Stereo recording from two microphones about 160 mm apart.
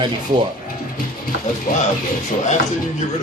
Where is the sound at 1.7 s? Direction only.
60° left (ahead or behind).